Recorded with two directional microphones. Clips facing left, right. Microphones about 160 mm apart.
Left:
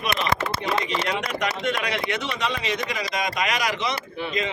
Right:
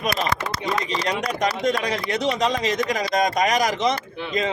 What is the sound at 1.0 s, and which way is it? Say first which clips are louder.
A man's voice: right 3 dB; 40° right (ahead or behind).